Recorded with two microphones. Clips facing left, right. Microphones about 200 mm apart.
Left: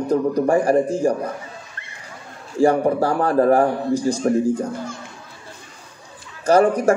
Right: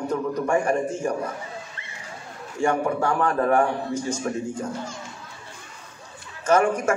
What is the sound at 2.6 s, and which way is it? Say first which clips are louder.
A man's voice: left 6 dB; 35° left (ahead or behind).